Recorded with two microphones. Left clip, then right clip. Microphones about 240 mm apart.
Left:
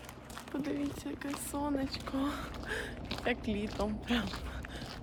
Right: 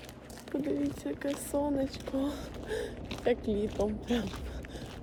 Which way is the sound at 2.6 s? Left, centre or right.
Centre.